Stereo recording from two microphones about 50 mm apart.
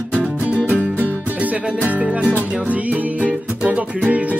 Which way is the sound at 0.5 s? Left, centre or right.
Right.